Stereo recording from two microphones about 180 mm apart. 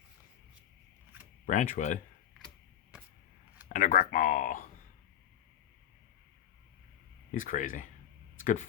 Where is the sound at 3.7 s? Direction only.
45° left (ahead or behind).